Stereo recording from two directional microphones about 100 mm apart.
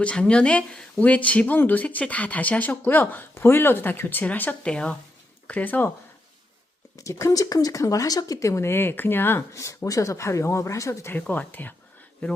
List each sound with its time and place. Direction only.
0.0 s speech: 10° left (ahead or behind)
6.9 s speech: 30° left (ahead or behind)
11.1 s speech: 20° left (ahead or behind)